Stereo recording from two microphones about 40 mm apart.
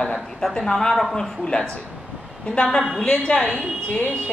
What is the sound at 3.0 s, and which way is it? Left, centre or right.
Speech, left.